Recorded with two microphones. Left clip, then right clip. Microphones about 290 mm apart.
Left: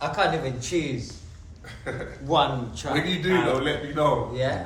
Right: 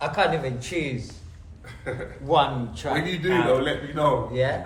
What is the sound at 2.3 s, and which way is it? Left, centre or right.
Speech, right.